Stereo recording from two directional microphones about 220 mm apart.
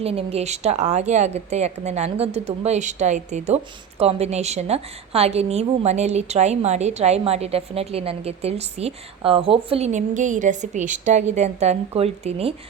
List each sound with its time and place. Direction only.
0.0 s a woman's voice: 25° right (ahead or behind)